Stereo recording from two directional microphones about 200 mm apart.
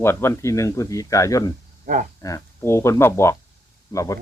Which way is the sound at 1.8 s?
40° right (ahead or behind).